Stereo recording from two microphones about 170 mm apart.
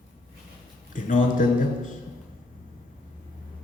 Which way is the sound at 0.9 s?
50° left (ahead or behind).